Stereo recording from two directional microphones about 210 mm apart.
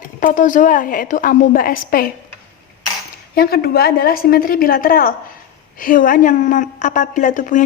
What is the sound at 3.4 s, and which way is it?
A woman's voice, 45° left (ahead or behind).